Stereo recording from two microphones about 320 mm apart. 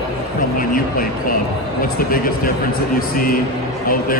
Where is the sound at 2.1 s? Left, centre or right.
Left.